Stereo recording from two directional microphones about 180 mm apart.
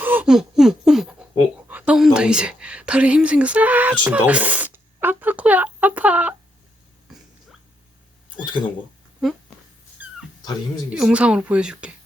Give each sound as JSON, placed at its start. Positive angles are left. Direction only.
{"t": 0.0, "sound": "a sound", "side_deg": -10}
{"t": 1.6, "sound": "a woman's voice", "side_deg": -10}
{"t": 10.0, "sound": "dog", "side_deg": -10}
{"t": 10.9, "sound": "speech", "side_deg": -5}